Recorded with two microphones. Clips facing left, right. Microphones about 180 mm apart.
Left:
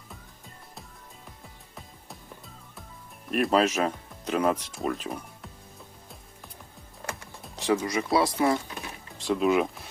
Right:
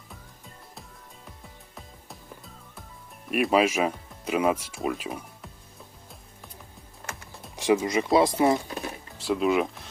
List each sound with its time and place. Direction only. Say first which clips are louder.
1.7 s music: even; centre (ahead or behind)
3.2 s speech: right 1 dB; 5° right (ahead or behind)
7.5 s speech: right 3 dB; 15° right (ahead or behind)
9.1 s a sound: even; 5° right (ahead or behind)